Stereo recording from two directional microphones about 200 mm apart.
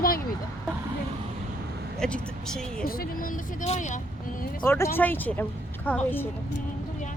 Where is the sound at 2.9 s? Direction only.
45° left (ahead or behind).